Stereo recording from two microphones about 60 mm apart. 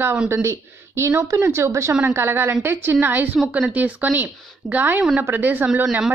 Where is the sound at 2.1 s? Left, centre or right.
Right.